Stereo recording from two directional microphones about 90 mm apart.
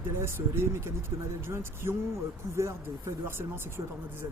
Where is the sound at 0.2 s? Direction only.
30° right (ahead or behind).